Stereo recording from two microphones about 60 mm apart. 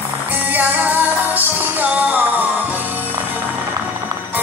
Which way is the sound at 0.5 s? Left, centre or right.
Right.